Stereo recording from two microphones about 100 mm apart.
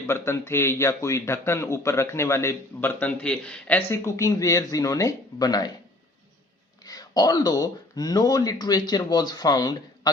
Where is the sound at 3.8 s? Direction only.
25° left (ahead or behind); by 5.6 s 40° left (ahead or behind).